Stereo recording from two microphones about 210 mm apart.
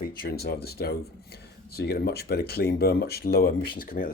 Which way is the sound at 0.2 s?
50° left (ahead or behind).